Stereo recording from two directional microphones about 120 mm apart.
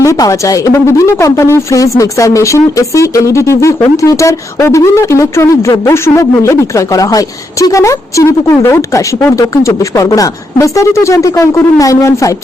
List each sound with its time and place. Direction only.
0.0 s speech: 25° left (ahead or behind)